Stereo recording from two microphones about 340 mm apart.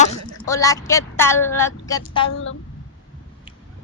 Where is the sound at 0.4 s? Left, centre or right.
Centre.